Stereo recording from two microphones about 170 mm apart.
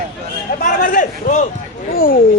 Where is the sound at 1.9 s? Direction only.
60° left (ahead or behind).